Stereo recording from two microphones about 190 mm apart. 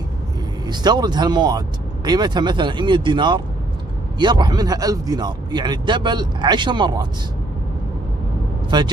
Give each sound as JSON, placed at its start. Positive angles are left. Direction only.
{"t": 0.7, "sound": "speech", "side_deg": -20}
{"t": 8.6, "sound": "speech", "side_deg": -25}